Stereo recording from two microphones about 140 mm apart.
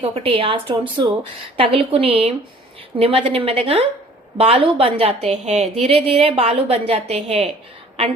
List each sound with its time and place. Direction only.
0.0 s a woman's voice: 40° right (ahead or behind)